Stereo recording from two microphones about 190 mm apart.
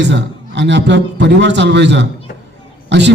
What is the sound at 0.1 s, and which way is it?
A man's voice, 70° right (ahead or behind).